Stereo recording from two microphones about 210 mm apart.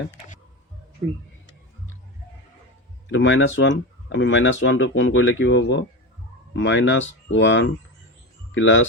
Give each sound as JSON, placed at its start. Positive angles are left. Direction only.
{"t": 3.1, "sound": "speech", "side_deg": 65}